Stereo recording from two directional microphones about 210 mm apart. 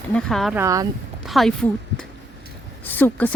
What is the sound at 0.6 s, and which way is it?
Speech, 15° right (ahead or behind).